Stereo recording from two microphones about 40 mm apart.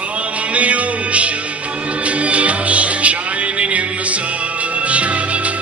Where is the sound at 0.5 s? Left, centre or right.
Right.